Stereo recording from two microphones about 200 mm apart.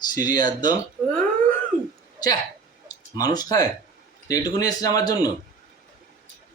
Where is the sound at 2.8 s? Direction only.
20° left (ahead or behind).